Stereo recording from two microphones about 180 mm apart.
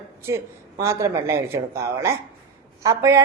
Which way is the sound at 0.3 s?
15° right (ahead or behind).